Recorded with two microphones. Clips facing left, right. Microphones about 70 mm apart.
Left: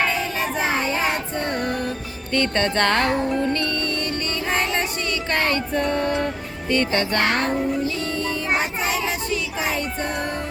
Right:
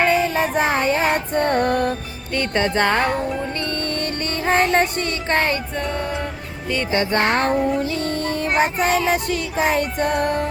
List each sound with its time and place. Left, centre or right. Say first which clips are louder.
0.3 s music: right 4 dB; right
2.3 s music: right 1 dB; centre
3.7 s music: right 1 dB; right
5.3 s music: right 3 dB; right
5.7 s music: left 3 dB; centre
6.9 s music: right 2 dB; centre
7.5 s music: right 3 dB; centre
7.8 s music: right 2 dB; right